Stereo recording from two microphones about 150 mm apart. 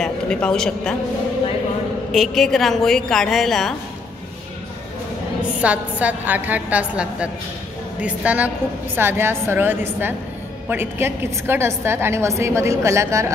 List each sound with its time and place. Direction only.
0.0 s a woman's voice: 5° left (ahead or behind)
2.1 s a woman's voice: centre (ahead or behind)
5.6 s a woman's voice: 10° right (ahead or behind)